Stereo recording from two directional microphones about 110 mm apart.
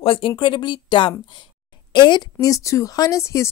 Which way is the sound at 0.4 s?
45° left (ahead or behind).